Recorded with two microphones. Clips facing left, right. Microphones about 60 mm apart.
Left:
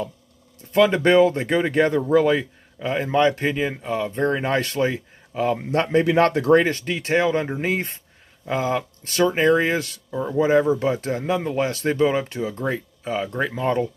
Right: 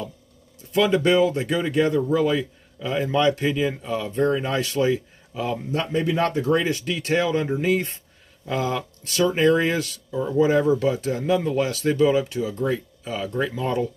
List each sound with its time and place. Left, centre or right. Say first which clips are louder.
0.7 s speech: left 3 dB; left
4.4 s speech: left 2 dB; left
5.7 s speech: left 4 dB; left
6.6 s speech: left 2 dB; left
6.9 s speech: left 2 dB; left